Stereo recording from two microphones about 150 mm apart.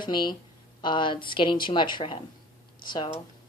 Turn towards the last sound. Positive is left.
turn(degrees=30)  # may be behind; listen again after turning